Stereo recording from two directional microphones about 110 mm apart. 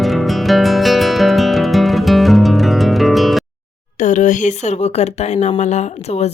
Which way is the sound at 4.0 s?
90° left.